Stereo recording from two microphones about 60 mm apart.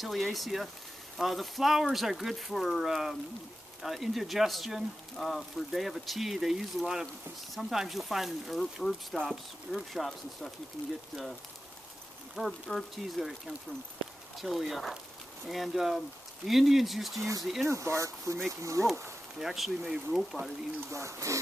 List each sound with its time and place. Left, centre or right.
0.0 s speech: centre
12.4 s speech: centre
14.4 s speech: centre
17.6 s speech: right
19.3 s speech: centre
20.9 s speech: right